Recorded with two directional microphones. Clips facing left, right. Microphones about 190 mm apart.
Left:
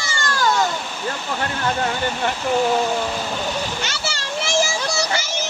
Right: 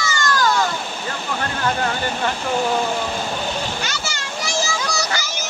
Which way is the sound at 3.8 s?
30° left (ahead or behind).